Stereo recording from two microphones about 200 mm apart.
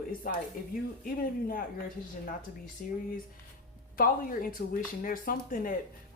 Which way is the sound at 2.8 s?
45° left (ahead or behind).